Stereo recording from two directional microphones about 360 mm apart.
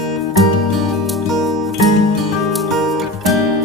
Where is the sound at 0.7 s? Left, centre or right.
Centre.